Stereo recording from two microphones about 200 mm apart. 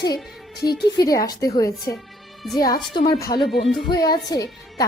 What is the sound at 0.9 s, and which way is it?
Speech, 20° left (ahead or behind).